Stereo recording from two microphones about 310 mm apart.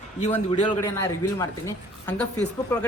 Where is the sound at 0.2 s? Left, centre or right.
Centre.